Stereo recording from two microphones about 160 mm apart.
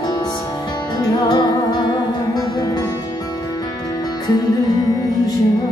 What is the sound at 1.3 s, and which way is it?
Music, 25° left (ahead or behind).